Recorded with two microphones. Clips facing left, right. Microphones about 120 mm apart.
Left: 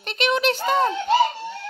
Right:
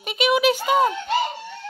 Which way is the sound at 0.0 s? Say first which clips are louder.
Right 3 dB; 10° right (ahead or behind).